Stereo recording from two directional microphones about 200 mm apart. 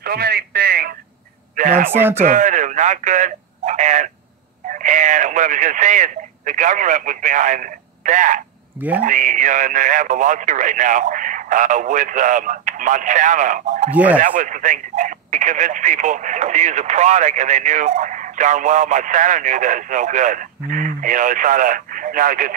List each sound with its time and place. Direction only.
0.0 s radio: 50° right (ahead or behind)
1.6 s speech: 45° right (ahead or behind)
13.8 s speech: 5° right (ahead or behind)
14.2 s speech: 40° right (ahead or behind)